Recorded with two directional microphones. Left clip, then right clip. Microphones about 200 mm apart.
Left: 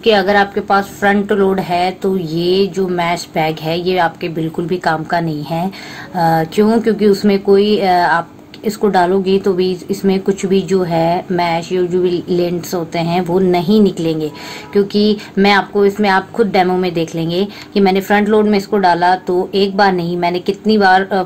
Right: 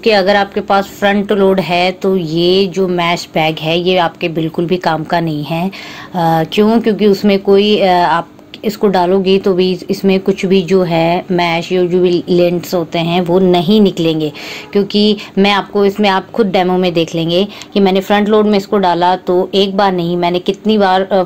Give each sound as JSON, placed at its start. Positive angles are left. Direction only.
{"t": 0.0, "sound": "a woman's voice", "side_deg": -25}